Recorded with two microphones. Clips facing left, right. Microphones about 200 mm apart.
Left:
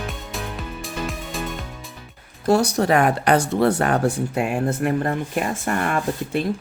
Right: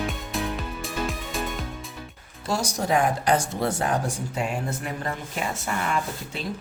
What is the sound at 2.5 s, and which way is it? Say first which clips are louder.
Speech: left 7 dB; 60° left (ahead or behind).